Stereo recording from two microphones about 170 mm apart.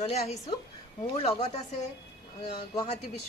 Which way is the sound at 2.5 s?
25° left (ahead or behind).